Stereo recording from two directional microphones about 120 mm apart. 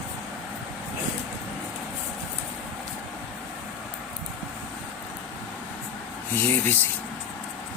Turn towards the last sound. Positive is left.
turn(degrees=15)  # may be behind; listen again after turning